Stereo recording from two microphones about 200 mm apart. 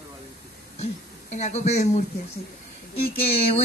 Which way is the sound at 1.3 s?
35° left (ahead or behind).